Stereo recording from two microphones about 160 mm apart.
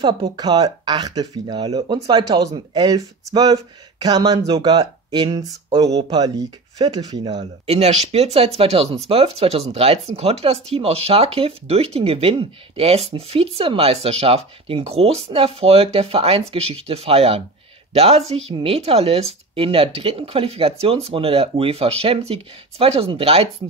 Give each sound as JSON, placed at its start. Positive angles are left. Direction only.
{"t": 0.0, "sound": "speech", "side_deg": -25}
{"t": 7.6, "sound": "speech", "side_deg": -40}